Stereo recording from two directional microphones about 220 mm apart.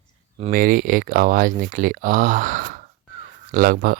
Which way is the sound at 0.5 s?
40° right (ahead or behind).